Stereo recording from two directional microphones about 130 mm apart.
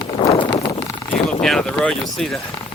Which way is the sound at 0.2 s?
40° left (ahead or behind).